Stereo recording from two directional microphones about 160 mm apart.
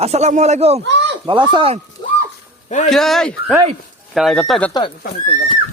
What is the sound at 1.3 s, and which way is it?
Speech, 30° right (ahead or behind).